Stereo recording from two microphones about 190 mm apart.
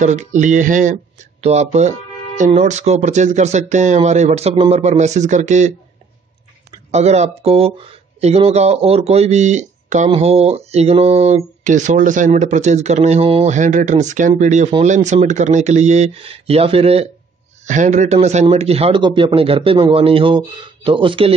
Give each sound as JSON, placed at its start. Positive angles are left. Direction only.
{"t": 0.0, "sound": "speech", "side_deg": -40}
{"t": 6.9, "sound": "a man's voice", "side_deg": -35}